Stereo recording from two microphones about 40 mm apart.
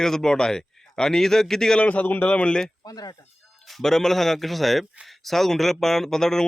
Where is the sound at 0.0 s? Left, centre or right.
Centre.